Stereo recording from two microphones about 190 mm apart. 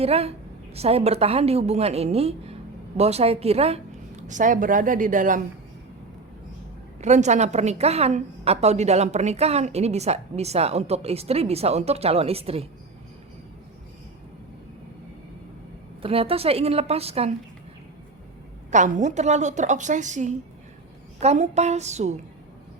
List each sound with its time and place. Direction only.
0.0 s a woman's voice: 35° right (ahead or behind)
7.0 s a woman's voice: 35° right (ahead or behind)
16.0 s a woman's voice: 30° right (ahead or behind)
18.7 s a woman's voice: 40° right (ahead or behind)